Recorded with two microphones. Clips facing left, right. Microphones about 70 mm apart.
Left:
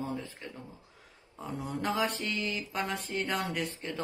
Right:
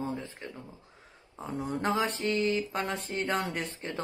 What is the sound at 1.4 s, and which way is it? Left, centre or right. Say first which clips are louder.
Speech: right 3 dB; right.